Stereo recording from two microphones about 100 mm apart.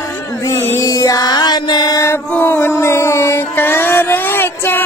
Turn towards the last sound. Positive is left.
turn(degrees=20)  # may be behind; listen again after turning